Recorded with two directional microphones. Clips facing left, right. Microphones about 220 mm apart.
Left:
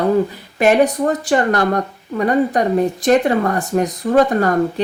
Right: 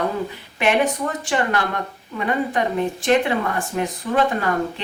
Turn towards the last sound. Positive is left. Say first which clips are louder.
# left 6 dB
turn(degrees=40)  # may be behind; listen again after turning